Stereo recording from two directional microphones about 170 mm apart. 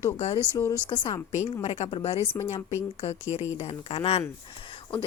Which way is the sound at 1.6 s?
35° left (ahead or behind).